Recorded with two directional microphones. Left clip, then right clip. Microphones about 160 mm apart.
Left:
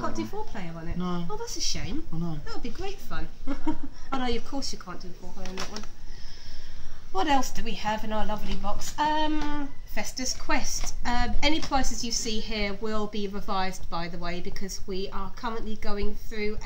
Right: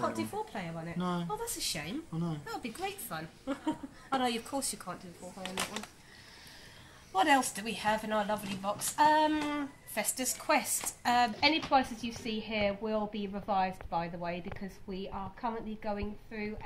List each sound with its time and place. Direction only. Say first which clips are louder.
0.0 s speech: left 2 dB; 15° right (ahead or behind)
0.9 s a woman's voice: left 2 dB; centre (ahead or behind)
1.4 s a woman's voice: left 4 dB; 15° right (ahead or behind)
7.2 s a woman's voice: left 1 dB; 5° right (ahead or behind)